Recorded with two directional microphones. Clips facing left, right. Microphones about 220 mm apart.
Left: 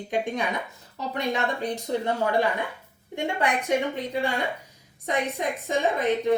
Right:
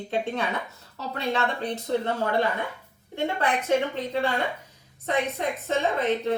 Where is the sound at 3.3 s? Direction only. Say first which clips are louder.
Right 1 dB; 15° left (ahead or behind).